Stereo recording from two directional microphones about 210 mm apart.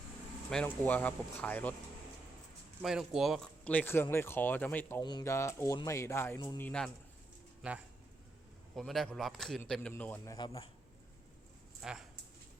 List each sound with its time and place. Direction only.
0.5 s speech: 5° left (ahead or behind)
2.8 s speech: centre (ahead or behind); by 6.7 s 20° left (ahead or behind)
6.7 s speech: 5° left (ahead or behind)
8.7 s a man's voice: centre (ahead or behind); by 10.7 s 20° left (ahead or behind)
11.8 s speech: centre (ahead or behind)